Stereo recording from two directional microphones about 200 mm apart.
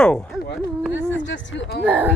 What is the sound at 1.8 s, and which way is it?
Speech, 10° right (ahead or behind).